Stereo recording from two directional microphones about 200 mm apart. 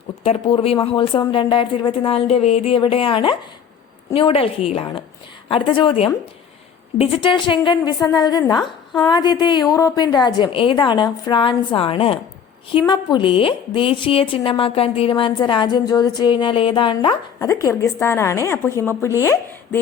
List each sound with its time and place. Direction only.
0.2 s a woman's voice: 30° left (ahead or behind)
8.6 s a woman's voice: centre (ahead or behind)
9.0 s a woman's voice: 20° left (ahead or behind)